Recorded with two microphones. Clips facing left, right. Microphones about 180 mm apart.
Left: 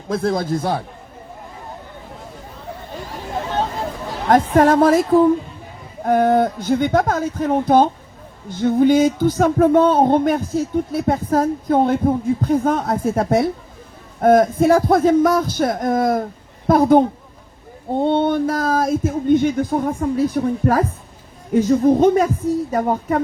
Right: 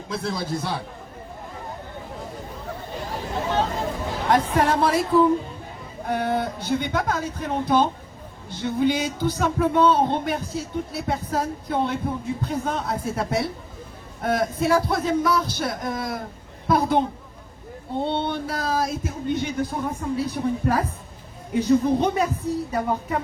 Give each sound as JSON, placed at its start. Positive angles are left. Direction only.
{"t": 0.1, "sound": "speech", "side_deg": 50}
{"t": 4.3, "sound": "speech", "side_deg": 45}
{"t": 18.0, "sound": "speech", "side_deg": 50}